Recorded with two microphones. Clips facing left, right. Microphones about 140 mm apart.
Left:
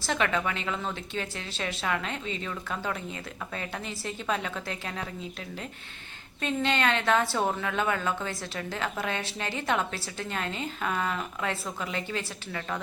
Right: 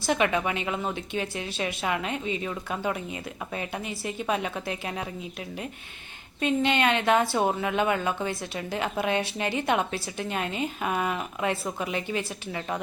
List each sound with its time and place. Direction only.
0.0 s a woman's voice: 15° right (ahead or behind)
6.4 s a woman's voice: 15° right (ahead or behind)